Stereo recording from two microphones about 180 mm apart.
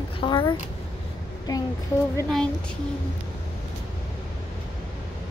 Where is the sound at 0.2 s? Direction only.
25° left (ahead or behind).